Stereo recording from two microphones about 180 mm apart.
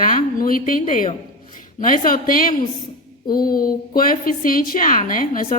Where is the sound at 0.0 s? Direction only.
50° left (ahead or behind).